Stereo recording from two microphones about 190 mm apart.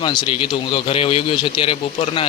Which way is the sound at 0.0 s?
25° left (ahead or behind).